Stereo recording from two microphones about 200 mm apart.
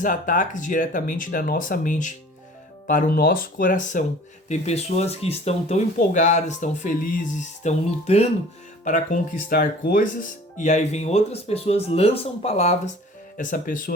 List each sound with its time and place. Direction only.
0.0 s speech: 40° left (ahead or behind)